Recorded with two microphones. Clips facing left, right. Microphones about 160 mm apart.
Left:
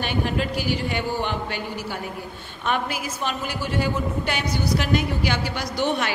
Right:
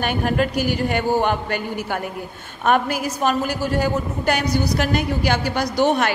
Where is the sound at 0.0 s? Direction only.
50° right (ahead or behind).